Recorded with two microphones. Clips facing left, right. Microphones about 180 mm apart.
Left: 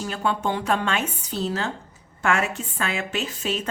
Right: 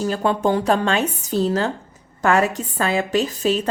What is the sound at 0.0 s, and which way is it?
Speech, 40° right (ahead or behind).